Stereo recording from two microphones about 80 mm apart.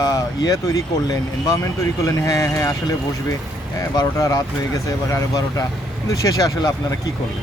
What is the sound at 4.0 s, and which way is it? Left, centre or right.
Speech, left.